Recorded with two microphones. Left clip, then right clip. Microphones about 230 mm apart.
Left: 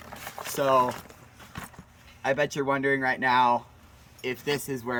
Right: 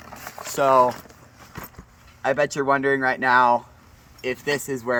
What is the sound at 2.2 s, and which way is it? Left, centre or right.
Speech, centre.